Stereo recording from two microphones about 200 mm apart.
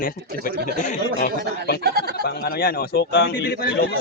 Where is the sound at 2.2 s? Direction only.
50° left (ahead or behind).